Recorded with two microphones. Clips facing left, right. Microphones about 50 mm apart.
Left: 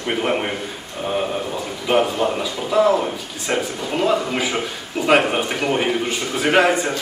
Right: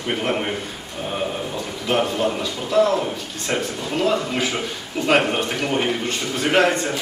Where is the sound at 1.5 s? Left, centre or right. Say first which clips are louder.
Left 3 dB; centre.